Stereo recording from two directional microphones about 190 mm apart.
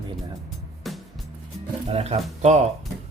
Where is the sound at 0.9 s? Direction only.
Centre (ahead or behind).